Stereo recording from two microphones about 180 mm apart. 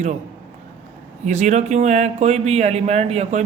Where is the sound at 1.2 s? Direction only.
40° right (ahead or behind).